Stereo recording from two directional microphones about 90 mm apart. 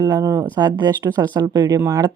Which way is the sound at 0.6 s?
55° right (ahead or behind).